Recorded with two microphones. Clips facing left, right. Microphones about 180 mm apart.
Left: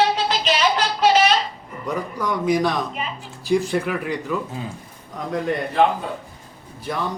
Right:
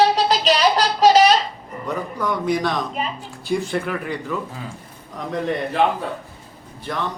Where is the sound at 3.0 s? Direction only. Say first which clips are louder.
Right 3 dB; 35° right (ahead or behind).